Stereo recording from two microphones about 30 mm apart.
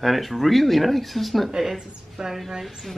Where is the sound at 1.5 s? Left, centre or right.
Centre.